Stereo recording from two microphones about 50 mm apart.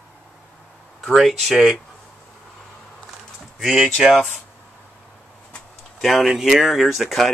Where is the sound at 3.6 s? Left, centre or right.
Centre.